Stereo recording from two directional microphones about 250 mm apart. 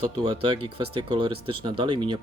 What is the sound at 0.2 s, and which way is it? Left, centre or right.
Speech, centre.